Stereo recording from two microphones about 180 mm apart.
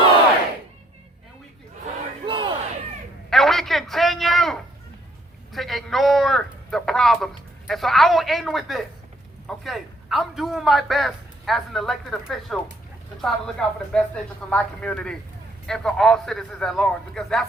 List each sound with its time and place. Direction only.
2.2 s battle cry: 25° right (ahead or behind)
3.2 s a sound: centre (ahead or behind)
7.7 s a man's voice: centre (ahead or behind)